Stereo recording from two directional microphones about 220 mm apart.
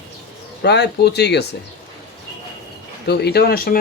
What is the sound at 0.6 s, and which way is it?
Speech, 50° left (ahead or behind).